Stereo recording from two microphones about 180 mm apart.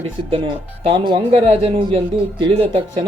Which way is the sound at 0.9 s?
25° right (ahead or behind).